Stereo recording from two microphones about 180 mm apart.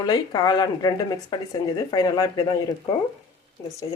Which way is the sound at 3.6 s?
15° left (ahead or behind).